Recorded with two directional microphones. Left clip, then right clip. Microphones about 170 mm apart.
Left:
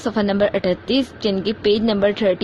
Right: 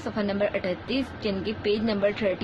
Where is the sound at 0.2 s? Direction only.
45° left (ahead or behind).